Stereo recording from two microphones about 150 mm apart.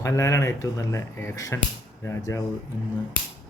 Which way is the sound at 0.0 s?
20° left (ahead or behind).